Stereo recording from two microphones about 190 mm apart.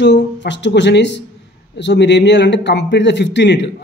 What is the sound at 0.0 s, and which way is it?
Speech, 65° left (ahead or behind).